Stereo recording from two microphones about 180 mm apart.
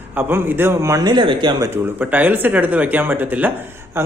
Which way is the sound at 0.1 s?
10° right (ahead or behind).